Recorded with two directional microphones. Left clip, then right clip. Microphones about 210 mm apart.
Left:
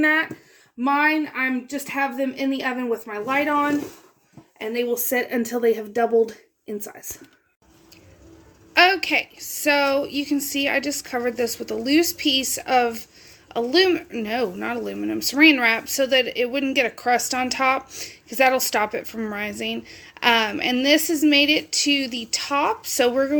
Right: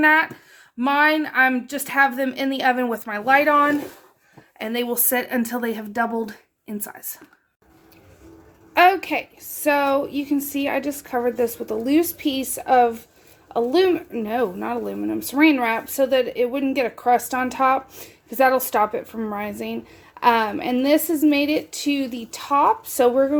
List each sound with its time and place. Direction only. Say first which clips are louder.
0.0 s a sound: right 3 dB; 45° right (ahead or behind)
0.8 s speech: right 2 dB; 55° right (ahead or behind)
5.1 s speech: right 2 dB; 45° right (ahead or behind)
8.7 s a woman's voice: right 1 dB; 5° right (ahead or behind)
19.8 s speech: left 3 dB; 45° right (ahead or behind)
20.1 s a woman's voice: right 1 dB; 5° right (ahead or behind)